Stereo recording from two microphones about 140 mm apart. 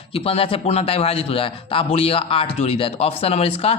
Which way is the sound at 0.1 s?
45° left (ahead or behind).